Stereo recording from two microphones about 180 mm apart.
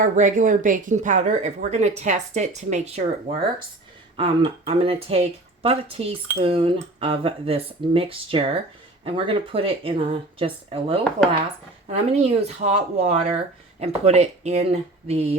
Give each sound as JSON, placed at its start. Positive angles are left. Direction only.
{"t": 0.0, "sound": "speech", "side_deg": -45}